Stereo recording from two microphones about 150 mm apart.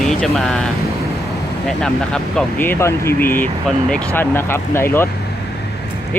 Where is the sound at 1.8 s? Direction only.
5° left (ahead or behind).